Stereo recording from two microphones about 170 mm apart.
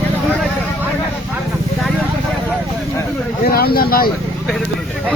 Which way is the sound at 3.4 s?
65° left (ahead or behind).